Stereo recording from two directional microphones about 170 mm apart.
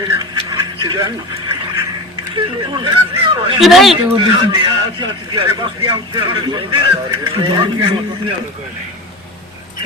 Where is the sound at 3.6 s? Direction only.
Centre (ahead or behind).